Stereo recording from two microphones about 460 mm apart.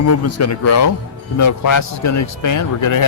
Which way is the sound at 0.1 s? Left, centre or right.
Left.